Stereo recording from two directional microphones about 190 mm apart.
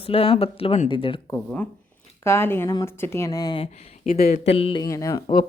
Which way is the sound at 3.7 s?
35° left (ahead or behind).